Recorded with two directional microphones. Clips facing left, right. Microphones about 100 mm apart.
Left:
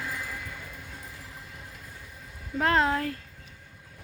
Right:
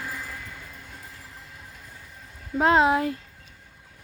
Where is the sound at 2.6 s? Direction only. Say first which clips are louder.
Right 5 dB; 20° right (ahead or behind).